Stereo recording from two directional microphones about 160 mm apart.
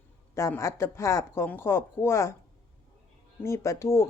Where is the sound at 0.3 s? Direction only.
20° left (ahead or behind).